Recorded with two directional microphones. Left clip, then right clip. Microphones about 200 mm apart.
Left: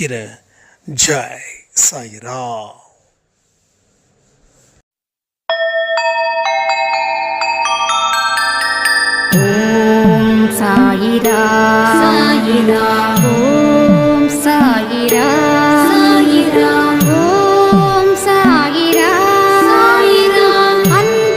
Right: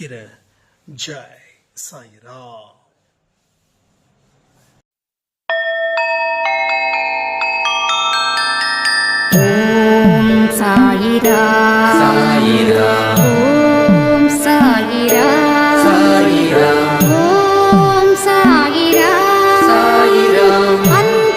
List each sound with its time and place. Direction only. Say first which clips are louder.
0.0 s speech: left 11 dB; 25° left (ahead or behind)
0.9 s a man's voice: left 13 dB; 40° left (ahead or behind)
6.4 s glockenspiel: left 1 dB; 5° right (ahead or behind)
7.6 s music: left 1 dB; 5° right (ahead or behind)